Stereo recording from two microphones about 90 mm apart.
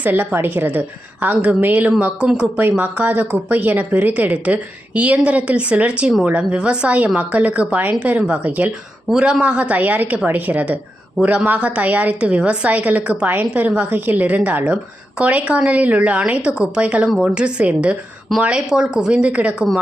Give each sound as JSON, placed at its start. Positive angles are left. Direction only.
{"t": 0.0, "sound": "a woman's voice", "side_deg": -20}
{"t": 2.6, "sound": "speech", "side_deg": -20}
{"t": 9.0, "sound": "speech", "side_deg": -5}